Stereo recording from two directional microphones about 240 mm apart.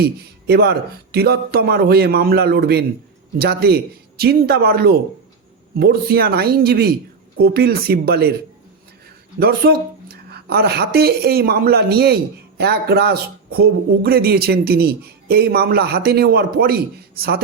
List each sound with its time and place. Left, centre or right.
0.0 s a woman's voice: right
9.4 s a woman's voice: right